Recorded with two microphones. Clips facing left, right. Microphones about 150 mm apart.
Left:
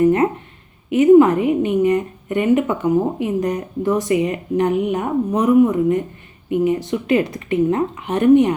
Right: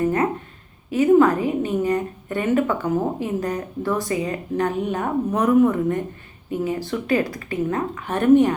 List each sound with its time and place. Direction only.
0.9 s a woman's voice: 20° left (ahead or behind)